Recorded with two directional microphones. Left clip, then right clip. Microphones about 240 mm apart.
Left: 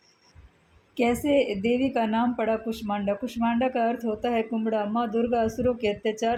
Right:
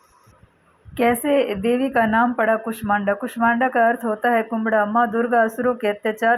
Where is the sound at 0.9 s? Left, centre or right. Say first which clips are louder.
Right 5 dB; centre.